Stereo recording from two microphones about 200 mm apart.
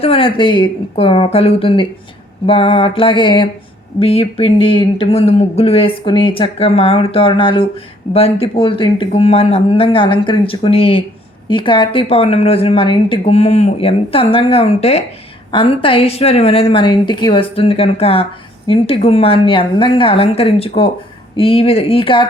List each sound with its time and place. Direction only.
0.0 s speech: 30° left (ahead or behind)